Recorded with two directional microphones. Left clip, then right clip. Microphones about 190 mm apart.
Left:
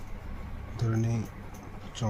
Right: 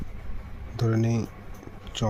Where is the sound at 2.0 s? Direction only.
50° right (ahead or behind).